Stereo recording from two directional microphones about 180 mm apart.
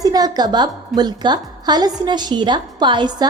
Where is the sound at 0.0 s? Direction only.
20° right (ahead or behind).